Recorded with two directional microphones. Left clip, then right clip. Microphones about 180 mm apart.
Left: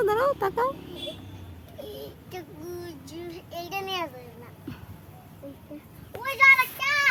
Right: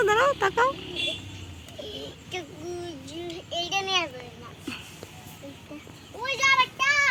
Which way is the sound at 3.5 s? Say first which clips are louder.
Right 5 dB; 20° left (ahead or behind).